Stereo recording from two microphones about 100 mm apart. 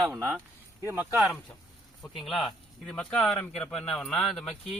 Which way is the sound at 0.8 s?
25° right (ahead or behind).